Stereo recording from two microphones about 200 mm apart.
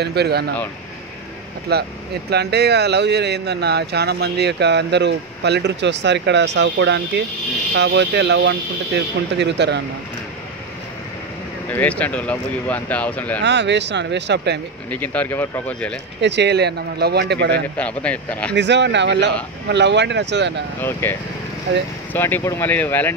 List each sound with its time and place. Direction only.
0.0 s speech: 55° right (ahead or behind)
1.7 s speech: 55° right (ahead or behind)
11.7 s speech: 10° left (ahead or behind)
13.4 s speech: 60° right (ahead or behind)
14.9 s speech: 10° left (ahead or behind)
16.2 s speech: 60° right (ahead or behind)
17.7 s speech: 5° left (ahead or behind)
18.5 s speech: 60° right (ahead or behind)
20.8 s speech: 10° left (ahead or behind)